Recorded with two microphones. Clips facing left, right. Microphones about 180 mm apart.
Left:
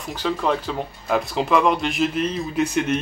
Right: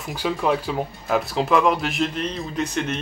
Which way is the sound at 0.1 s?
10° right (ahead or behind).